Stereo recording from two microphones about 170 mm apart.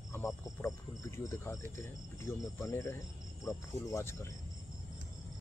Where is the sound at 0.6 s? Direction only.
15° left (ahead or behind).